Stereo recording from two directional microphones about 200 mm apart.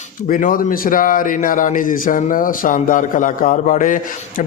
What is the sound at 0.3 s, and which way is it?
Speech, 45° left (ahead or behind).